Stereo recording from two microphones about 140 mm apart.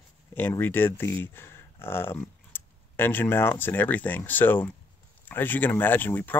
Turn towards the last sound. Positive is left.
turn(degrees=15)  # may be behind; listen again after turning